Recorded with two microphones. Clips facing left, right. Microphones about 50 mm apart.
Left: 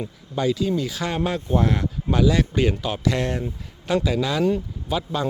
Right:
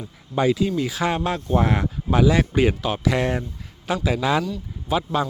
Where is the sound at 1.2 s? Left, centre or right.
Centre.